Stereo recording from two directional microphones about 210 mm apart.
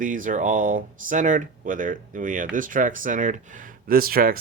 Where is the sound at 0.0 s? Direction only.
40° right (ahead or behind).